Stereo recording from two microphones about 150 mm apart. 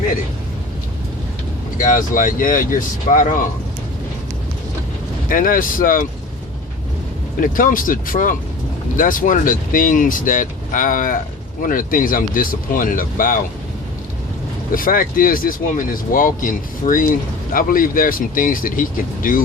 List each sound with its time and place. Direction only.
1.8 s speech: 60° left (ahead or behind)
5.3 s speech: 65° left (ahead or behind)
7.3 s speech: 65° left (ahead or behind)
14.7 s speech: 70° left (ahead or behind)